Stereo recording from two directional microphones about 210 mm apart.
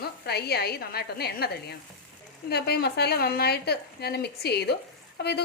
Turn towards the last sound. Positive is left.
turn(degrees=50)  # may be behind; listen again after turning